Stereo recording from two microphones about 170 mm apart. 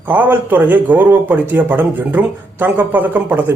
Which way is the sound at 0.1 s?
10° right (ahead or behind).